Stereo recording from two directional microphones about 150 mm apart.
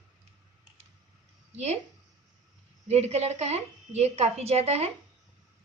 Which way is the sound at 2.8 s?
45° right (ahead or behind).